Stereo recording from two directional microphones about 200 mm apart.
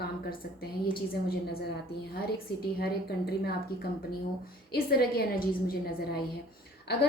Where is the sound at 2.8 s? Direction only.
55° left (ahead or behind).